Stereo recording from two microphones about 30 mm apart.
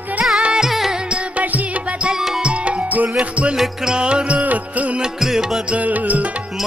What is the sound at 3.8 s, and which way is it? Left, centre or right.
Music, right.